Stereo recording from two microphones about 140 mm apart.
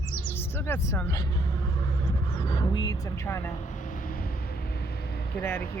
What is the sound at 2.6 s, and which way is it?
Vehicle, 30° left (ahead or behind).